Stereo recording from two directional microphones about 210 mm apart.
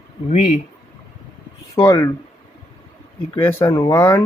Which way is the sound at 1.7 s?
15° left (ahead or behind).